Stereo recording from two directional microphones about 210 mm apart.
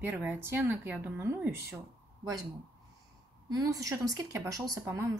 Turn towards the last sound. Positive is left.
turn(degrees=-15)  # may be behind; listen again after turning